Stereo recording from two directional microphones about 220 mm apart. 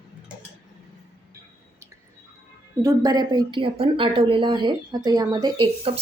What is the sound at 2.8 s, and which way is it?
A woman's voice, 20° right (ahead or behind).